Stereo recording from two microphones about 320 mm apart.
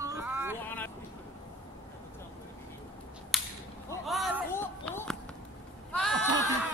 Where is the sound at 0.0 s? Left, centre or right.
Centre.